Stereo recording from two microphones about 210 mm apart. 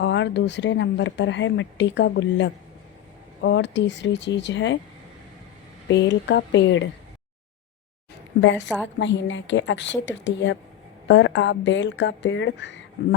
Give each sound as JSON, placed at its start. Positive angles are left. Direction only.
{"t": 0.0, "sound": "speech", "side_deg": 55}
{"t": 5.9, "sound": "speech", "side_deg": 60}
{"t": 8.3, "sound": "a woman's voice", "side_deg": 55}